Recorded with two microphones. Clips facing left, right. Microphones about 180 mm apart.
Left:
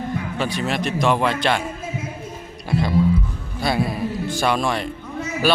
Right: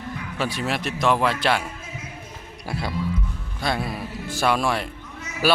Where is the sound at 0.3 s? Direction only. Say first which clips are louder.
Left 1 dB; 5° right (ahead or behind).